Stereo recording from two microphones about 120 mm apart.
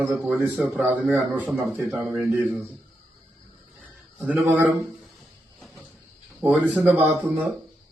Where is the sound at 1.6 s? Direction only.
Centre (ahead or behind).